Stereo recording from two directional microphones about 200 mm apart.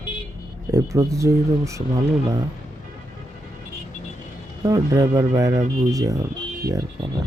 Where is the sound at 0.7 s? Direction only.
15° right (ahead or behind).